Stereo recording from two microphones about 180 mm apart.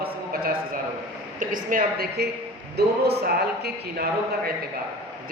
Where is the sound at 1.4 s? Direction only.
50° right (ahead or behind).